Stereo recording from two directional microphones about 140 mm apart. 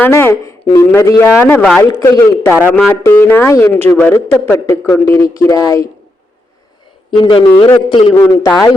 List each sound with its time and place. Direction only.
0.0 s speech: 20° left (ahead or behind)
7.2 s a man's voice: 35° left (ahead or behind)
8.1 s speech: 10° left (ahead or behind)